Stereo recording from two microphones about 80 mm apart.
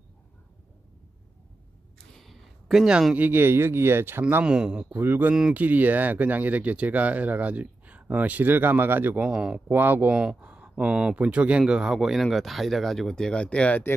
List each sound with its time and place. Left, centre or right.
2.1 s a sound: centre
3.2 s speech: right
4.2 s speech: centre
4.9 s speech: right
9.3 s speech: centre
9.7 s speech: right; by 13.8 s centre